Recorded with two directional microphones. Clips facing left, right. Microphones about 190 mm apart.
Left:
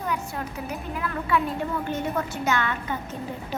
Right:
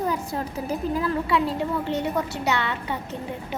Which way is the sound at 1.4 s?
75° right (ahead or behind).